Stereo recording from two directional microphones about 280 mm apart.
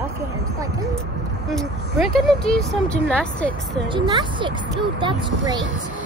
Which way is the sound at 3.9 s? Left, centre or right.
Centre.